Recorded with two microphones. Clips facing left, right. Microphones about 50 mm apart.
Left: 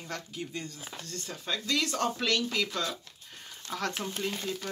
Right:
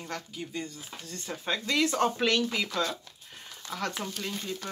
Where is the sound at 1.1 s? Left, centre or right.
Centre.